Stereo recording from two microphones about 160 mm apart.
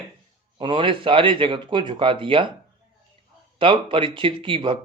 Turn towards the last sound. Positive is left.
turn(degrees=-30)  # may be behind; listen again after turning